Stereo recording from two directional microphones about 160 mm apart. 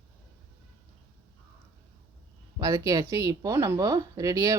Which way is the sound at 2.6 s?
20° right (ahead or behind).